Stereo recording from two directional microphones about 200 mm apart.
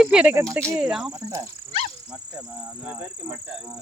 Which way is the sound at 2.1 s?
5° right (ahead or behind).